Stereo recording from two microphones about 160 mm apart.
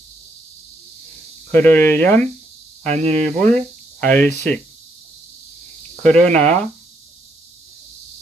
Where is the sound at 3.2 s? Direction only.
5° left (ahead or behind).